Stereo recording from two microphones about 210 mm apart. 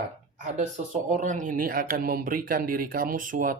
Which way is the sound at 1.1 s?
35° right (ahead or behind).